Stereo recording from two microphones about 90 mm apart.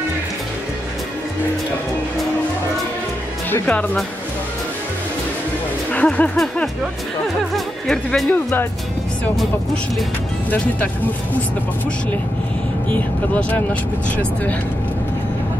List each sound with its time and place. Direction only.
3.6 s speech: 15° left (ahead or behind)
5.9 s speech: 15° left (ahead or behind)
6.3 s speech: 5° left (ahead or behind)
12.9 s speech: 15° left (ahead or behind)